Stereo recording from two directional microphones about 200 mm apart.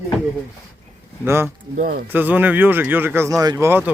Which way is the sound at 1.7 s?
45° right (ahead or behind).